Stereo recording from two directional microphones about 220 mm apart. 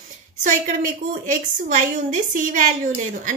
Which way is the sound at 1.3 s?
35° right (ahead or behind).